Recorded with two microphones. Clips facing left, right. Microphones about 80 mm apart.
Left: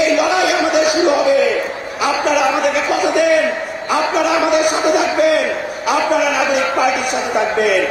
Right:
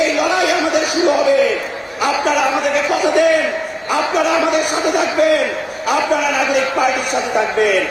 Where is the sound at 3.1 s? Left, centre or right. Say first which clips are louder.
Even; right.